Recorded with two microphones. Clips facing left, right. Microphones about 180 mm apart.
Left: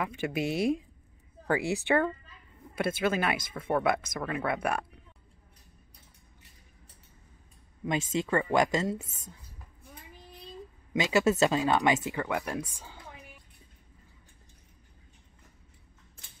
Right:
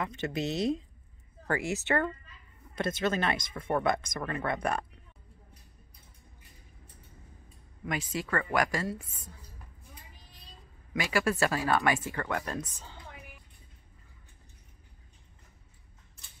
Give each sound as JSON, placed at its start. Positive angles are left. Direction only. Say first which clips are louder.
{"t": 0.0, "sound": "speech", "louder": "left 2 dB", "side_deg": 10}
{"t": 7.8, "sound": "a woman's voice", "louder": "left 4 dB", "side_deg": 25}
{"t": 9.0, "sound": "speech", "louder": "left 3 dB", "side_deg": 45}
{"t": 10.9, "sound": "speech", "louder": "left 4 dB", "side_deg": 20}